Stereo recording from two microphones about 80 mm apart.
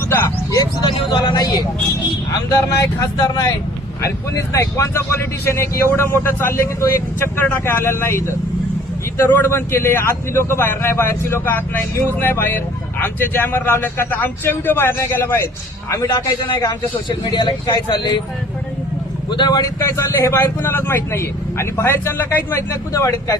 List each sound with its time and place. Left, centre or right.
0.9 s speech: left
2.3 s speech: left
4.0 s a man's voice: left
16.0 s speech: left
19.3 s speech: left
19.9 s a man's voice: left